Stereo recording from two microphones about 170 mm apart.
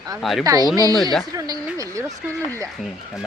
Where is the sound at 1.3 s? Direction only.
20° right (ahead or behind).